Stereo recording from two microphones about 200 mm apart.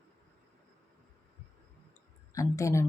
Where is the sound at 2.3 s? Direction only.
15° left (ahead or behind).